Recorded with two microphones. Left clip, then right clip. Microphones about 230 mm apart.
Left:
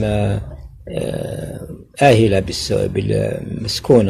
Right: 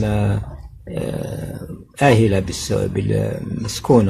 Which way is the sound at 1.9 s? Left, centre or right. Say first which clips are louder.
Left 3 dB; centre.